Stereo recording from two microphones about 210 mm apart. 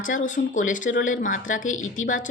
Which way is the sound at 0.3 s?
35° left (ahead or behind).